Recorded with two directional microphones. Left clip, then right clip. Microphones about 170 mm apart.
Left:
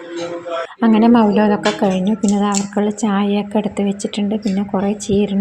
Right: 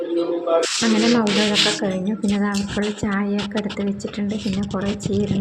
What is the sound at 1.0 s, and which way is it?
Speech, 40° left (ahead or behind).